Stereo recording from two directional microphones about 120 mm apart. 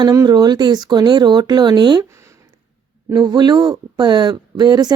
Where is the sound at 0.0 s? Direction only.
30° right (ahead or behind).